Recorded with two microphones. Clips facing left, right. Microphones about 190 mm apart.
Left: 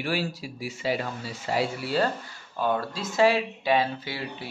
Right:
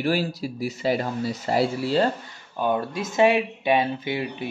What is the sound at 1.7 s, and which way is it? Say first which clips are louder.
Speech: right 4 dB; 25° right (ahead or behind).